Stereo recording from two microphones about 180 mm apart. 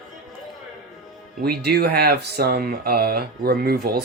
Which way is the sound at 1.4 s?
60° right (ahead or behind).